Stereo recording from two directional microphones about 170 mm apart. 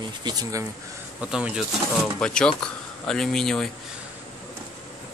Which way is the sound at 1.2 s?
5° right (ahead or behind).